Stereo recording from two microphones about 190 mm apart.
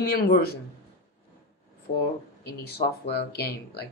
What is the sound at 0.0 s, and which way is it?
Speech, 55° left (ahead or behind).